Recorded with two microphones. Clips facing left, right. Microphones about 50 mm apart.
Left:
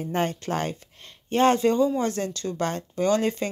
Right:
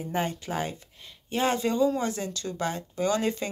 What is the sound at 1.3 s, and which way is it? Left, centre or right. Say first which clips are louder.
Speech: left 6 dB; left.